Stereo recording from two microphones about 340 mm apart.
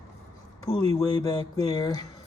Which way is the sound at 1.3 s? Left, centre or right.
Centre.